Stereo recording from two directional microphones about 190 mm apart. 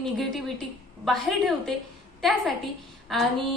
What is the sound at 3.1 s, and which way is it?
Speech, centre (ahead or behind).